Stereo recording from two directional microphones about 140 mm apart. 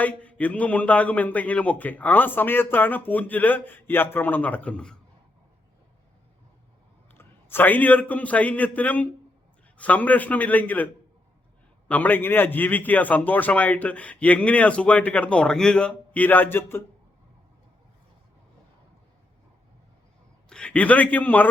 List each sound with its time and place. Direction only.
0.0 s a man's voice: 10° left (ahead or behind)
7.1 s a man's voice: 15° left (ahead or behind)
11.9 s a man's voice: 10° left (ahead or behind)
20.5 s a man's voice: 5° left (ahead or behind)